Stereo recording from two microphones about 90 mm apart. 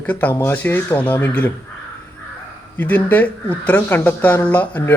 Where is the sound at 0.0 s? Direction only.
20° left (ahead or behind).